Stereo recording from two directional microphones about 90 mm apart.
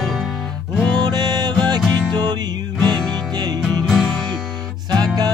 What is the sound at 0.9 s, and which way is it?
Music, 50° right (ahead or behind).